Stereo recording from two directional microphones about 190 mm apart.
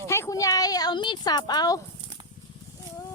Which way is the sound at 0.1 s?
15° left (ahead or behind).